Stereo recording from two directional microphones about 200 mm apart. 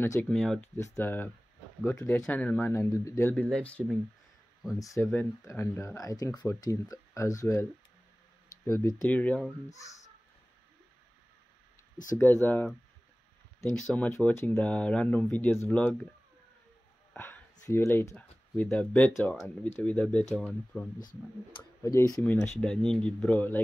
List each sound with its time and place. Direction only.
0.0 s speech: 10° left (ahead or behind)
4.7 s speech: 15° left (ahead or behind)
8.6 s speech: 15° left (ahead or behind)
12.2 s speech: 10° left (ahead or behind)
13.7 s speech: 5° left (ahead or behind)
17.1 s speech: 10° left (ahead or behind)